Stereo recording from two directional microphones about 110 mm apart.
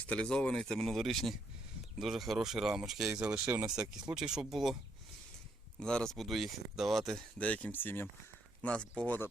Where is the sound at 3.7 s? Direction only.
5° right (ahead or behind).